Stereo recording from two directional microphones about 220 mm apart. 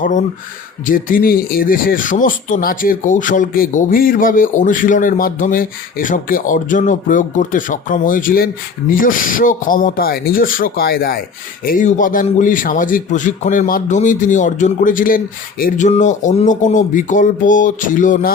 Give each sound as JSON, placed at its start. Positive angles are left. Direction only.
{"t": 0.0, "sound": "speech", "side_deg": 35}